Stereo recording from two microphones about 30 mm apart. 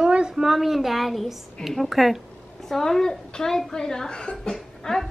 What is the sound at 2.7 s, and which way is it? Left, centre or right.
A woman's voice, centre.